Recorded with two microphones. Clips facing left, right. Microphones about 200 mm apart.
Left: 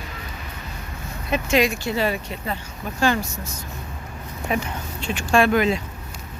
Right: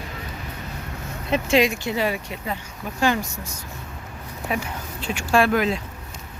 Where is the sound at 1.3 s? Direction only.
25° right (ahead or behind).